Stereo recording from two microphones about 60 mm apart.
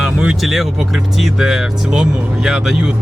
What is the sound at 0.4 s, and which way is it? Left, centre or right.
Speech, centre.